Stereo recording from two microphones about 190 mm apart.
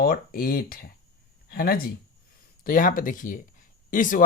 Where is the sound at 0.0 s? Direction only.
50° left (ahead or behind).